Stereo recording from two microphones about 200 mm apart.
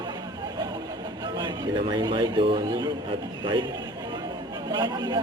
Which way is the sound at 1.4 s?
20° right (ahead or behind).